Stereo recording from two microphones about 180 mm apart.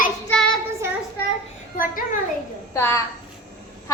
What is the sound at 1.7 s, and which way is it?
Speech, 50° left (ahead or behind).